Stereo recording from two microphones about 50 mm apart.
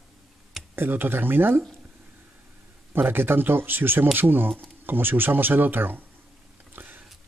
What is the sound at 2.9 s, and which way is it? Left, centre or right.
Speech, right.